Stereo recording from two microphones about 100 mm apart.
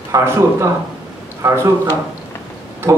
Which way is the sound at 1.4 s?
30° right (ahead or behind).